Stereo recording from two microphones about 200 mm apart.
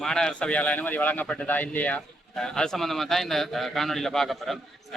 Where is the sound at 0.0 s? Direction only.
5° left (ahead or behind).